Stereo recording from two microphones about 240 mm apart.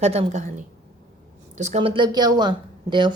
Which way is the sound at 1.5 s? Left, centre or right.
Right.